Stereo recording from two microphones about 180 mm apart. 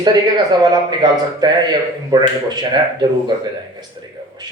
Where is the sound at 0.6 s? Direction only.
25° right (ahead or behind).